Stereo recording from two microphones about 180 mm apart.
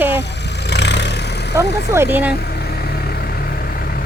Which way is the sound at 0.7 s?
70° left (ahead or behind).